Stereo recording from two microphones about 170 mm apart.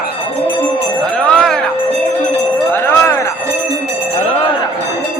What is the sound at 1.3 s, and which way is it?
Music, 5° left (ahead or behind).